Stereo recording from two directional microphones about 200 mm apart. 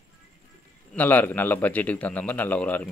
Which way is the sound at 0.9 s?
10° left (ahead or behind).